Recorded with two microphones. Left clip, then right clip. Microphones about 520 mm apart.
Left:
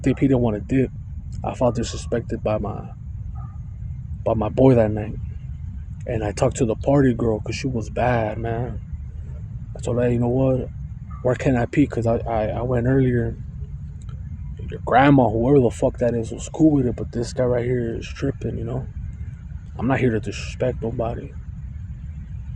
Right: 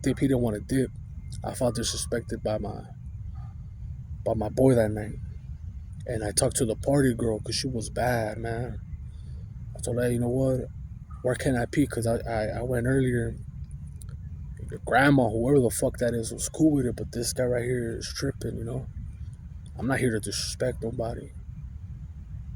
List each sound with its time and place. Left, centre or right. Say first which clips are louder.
0.0 s speech: left 6 dB; right
4.2 s speech: left 6 dB; right
9.7 s speech: left 6 dB; right
14.7 s speech: left 6 dB; right